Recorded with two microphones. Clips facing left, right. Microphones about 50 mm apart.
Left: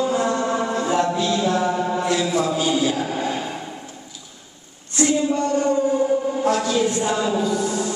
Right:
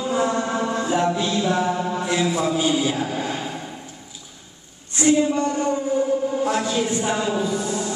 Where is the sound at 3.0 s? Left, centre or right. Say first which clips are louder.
Left 2 dB; centre.